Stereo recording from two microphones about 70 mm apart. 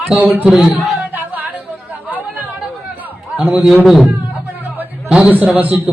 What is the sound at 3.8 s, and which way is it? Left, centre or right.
Speech, centre.